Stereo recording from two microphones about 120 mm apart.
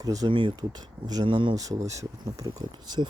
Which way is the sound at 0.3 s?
40° right (ahead or behind).